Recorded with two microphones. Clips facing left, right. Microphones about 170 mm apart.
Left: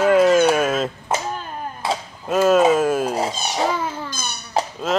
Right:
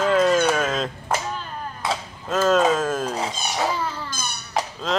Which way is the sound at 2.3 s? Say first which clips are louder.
Left 4 dB; 10° left (ahead or behind).